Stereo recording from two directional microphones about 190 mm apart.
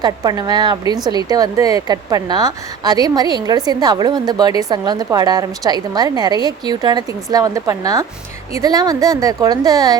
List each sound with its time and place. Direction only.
0.0 s a woman's voice: 20° right (ahead or behind)